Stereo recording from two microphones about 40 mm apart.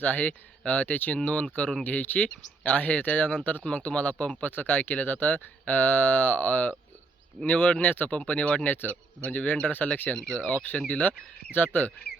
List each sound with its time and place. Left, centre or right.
0.0 s speech: left
1.2 s speech: left
1.8 s speech: left
8.3 s speech: left
8.6 s speech: left
8.9 s speech: left
9.7 s speech: left
11.5 s speech: left